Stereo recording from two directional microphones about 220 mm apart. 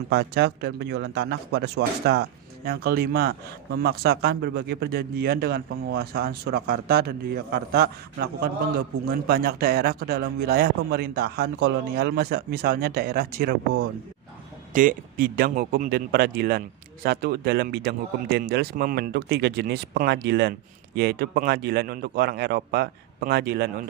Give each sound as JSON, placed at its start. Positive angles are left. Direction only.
{"t": 0.1, "sound": "speech", "side_deg": -50}
{"t": 14.7, "sound": "speech", "side_deg": -40}